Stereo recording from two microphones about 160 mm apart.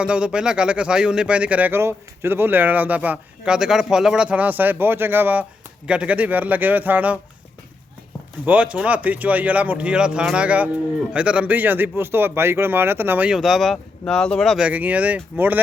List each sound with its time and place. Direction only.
0.0 s speech: 5° right (ahead or behind)
8.4 s speech: 10° right (ahead or behind)